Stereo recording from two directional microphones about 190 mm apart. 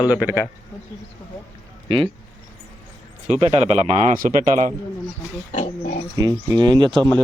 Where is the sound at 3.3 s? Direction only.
35° right (ahead or behind).